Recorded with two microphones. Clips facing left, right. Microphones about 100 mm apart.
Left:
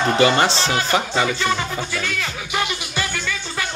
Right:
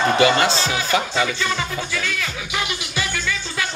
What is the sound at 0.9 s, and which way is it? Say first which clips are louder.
Speech: right 1 dB; 30° left (ahead or behind).